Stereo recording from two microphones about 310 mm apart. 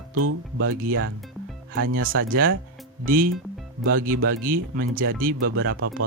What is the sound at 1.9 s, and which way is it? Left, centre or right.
Speech, right.